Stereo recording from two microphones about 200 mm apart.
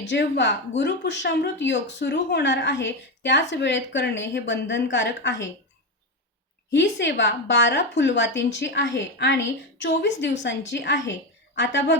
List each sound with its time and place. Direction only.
0.1 s a woman's voice: 60° left (ahead or behind)
6.7 s a woman's voice: 65° left (ahead or behind)